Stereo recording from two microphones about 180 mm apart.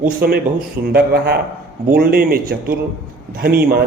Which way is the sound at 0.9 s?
60° right (ahead or behind).